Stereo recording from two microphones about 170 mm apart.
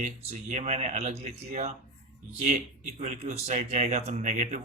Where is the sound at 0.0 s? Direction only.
40° right (ahead or behind).